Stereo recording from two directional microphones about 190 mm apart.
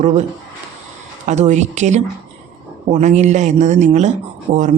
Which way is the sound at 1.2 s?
40° right (ahead or behind).